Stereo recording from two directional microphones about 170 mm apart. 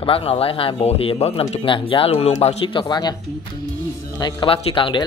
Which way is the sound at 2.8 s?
25° left (ahead or behind).